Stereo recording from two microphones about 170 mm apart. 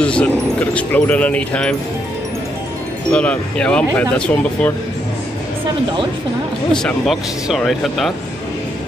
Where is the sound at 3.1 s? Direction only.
5° left (ahead or behind).